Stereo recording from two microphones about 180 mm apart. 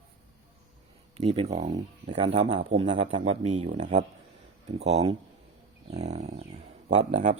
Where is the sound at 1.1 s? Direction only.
35° right (ahead or behind).